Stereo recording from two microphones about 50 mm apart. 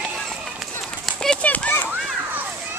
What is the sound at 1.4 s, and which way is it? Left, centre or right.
Children playing, left.